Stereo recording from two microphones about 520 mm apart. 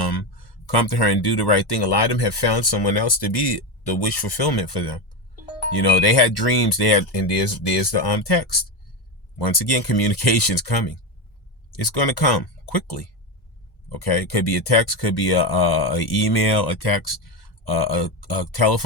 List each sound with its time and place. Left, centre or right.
0.6 s speech: left